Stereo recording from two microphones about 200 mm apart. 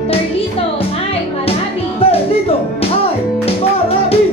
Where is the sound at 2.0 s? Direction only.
30° left (ahead or behind).